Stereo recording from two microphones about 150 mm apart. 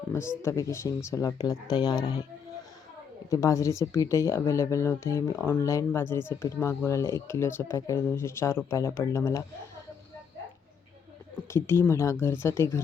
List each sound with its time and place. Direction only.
0.1 s speech: 15° left (ahead or behind)
3.2 s speech: 20° left (ahead or behind)
11.5 s speech: 15° left (ahead or behind)